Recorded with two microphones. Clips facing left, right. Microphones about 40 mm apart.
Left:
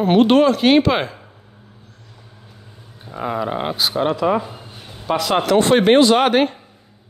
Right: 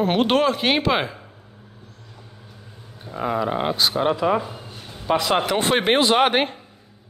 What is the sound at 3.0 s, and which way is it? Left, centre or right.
Speech, centre.